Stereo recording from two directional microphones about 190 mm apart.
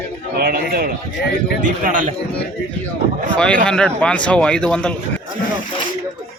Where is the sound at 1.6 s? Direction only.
45° right (ahead or behind).